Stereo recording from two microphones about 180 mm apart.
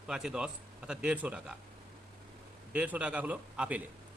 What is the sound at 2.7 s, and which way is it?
A man's voice, 5° right (ahead or behind).